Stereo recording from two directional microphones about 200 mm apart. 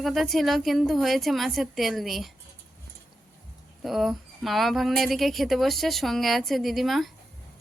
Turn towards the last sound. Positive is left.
turn(degrees=0)  # may be behind; listen again after turning